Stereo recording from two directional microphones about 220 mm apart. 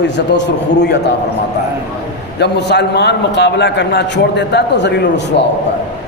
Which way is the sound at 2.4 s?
50° left (ahead or behind).